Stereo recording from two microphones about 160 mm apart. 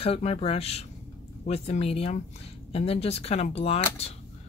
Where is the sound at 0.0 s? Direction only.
40° left (ahead or behind).